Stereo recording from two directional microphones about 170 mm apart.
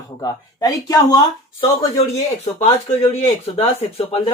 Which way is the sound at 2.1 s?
40° left (ahead or behind).